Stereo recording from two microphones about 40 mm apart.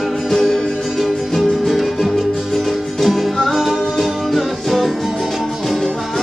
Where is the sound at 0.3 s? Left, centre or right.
Centre.